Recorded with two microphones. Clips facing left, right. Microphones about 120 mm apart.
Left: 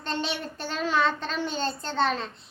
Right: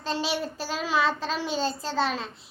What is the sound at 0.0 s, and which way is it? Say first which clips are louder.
A child's voice: right 2 dB; 5° right (ahead or behind).